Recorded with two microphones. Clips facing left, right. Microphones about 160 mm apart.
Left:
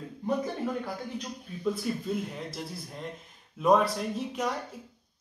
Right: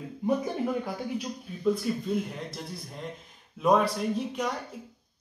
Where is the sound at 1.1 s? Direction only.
Centre (ahead or behind).